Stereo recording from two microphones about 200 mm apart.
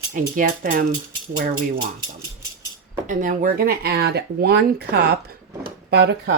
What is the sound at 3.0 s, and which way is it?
Speech, 40° right (ahead or behind).